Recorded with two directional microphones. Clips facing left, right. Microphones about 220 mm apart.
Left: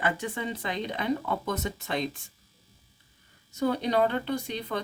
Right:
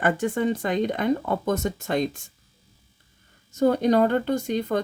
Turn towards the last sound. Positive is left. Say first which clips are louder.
# right 7 dB
turn(degrees=-45)  # may be behind; listen again after turning